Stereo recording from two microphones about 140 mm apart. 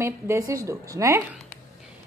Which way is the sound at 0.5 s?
25° right (ahead or behind).